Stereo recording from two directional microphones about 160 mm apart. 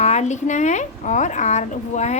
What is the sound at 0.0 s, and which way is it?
Speech, 45° left (ahead or behind).